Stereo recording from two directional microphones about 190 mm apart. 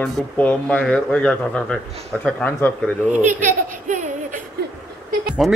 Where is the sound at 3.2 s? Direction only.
40° right (ahead or behind).